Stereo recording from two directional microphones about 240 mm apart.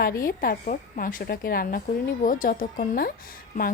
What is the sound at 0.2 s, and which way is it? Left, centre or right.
A woman's voice, left.